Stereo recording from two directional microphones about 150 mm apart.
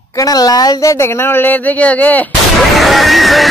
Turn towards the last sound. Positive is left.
turn(degrees=0)  # may be behind; listen again after turning